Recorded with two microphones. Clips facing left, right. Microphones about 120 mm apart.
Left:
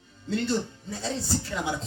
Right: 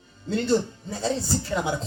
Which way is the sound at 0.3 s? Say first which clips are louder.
Right 4 dB; 35° right (ahead or behind).